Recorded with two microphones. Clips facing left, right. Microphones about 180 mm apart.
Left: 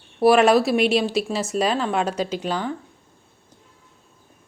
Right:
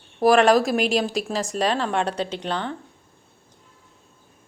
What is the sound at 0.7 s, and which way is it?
Speech, 40° right (ahead or behind).